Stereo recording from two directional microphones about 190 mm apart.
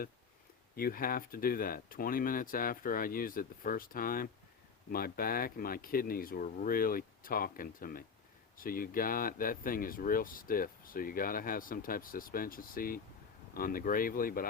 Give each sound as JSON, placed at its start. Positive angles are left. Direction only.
{"t": 0.8, "sound": "speech", "side_deg": 50}